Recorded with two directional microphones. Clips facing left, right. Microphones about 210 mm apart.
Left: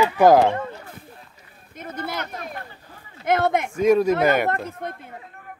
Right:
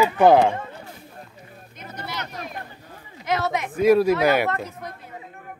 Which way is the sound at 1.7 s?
50° left (ahead or behind).